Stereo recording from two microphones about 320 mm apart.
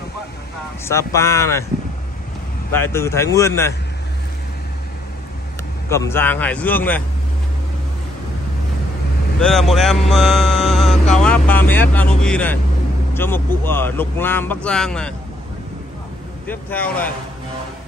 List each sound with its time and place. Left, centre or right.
0.8 s speech: centre
2.7 s speech: centre
5.9 s mantra: centre
9.4 s mantra: centre
13.1 s speech: centre
16.4 s mantra: centre